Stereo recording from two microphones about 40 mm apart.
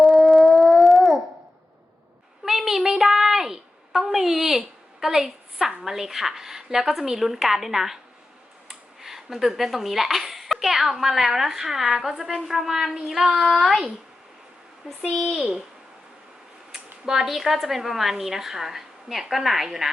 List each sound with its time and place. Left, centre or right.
0.0 s dog: centre
2.4 s a sound: centre
8.6 s speech: centre
12.5 s child singing: centre
13.5 s speech: centre
14.8 s child singing: centre
16.7 s speech: centre
19.3 s child singing: centre